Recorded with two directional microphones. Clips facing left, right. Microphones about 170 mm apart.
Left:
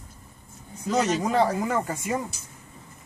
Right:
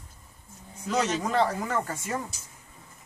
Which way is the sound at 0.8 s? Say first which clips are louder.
Left 3 dB; 10° left (ahead or behind).